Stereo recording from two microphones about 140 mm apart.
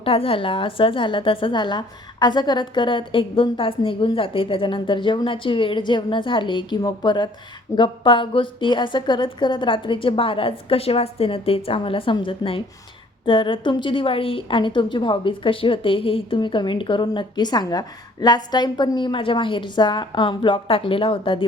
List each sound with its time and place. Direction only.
0.0 s a woman's voice: 40° left (ahead or behind)